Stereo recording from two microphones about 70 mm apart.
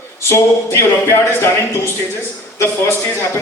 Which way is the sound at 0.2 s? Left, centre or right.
Left.